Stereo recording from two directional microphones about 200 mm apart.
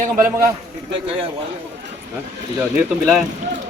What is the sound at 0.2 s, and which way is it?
Speech, 10° right (ahead or behind).